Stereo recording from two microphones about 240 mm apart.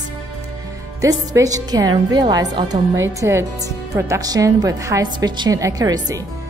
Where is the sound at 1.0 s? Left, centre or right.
Centre.